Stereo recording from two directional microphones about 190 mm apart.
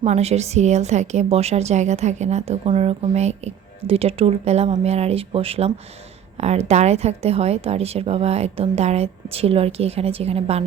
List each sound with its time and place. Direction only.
0.0 s a woman's voice: 35° right (ahead or behind)